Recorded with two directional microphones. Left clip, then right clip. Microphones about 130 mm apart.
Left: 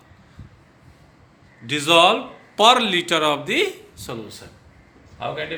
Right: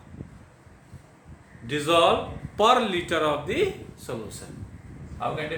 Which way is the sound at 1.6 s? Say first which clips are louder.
Left 6 dB; 90° left.